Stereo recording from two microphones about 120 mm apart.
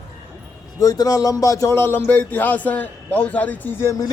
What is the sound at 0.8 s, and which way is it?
Speech, 30° left (ahead or behind).